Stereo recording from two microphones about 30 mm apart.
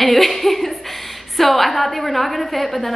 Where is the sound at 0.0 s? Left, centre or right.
Centre.